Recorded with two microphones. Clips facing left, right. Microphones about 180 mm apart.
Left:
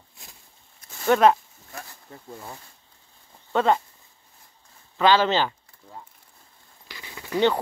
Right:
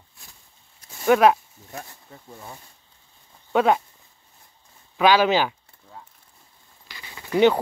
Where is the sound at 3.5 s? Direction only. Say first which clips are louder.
Right 2 dB; 10° right (ahead or behind).